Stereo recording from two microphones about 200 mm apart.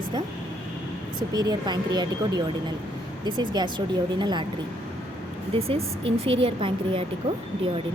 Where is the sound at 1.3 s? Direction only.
20° right (ahead or behind).